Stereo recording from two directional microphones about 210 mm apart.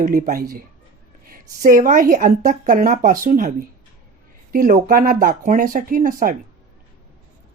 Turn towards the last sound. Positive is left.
turn(degrees=-40)  # may be behind; listen again after turning